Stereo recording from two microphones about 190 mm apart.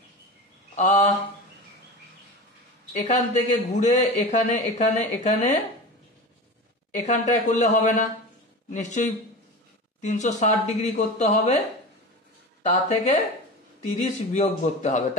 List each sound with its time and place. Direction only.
0.7 s mantra: 45° left (ahead or behind)
3.0 s speech: 40° left (ahead or behind)
7.1 s speech: 40° left (ahead or behind)
12.6 s speech: 40° left (ahead or behind)